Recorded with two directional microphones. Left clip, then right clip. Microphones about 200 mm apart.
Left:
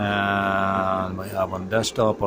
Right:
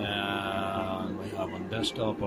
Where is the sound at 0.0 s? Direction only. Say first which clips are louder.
Left 9 dB; 30° left (ahead or behind).